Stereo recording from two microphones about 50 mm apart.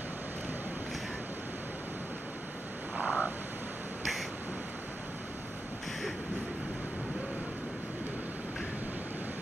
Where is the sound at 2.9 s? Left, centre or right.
Right.